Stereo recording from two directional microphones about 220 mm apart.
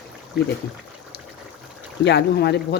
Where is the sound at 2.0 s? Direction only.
50° left (ahead or behind).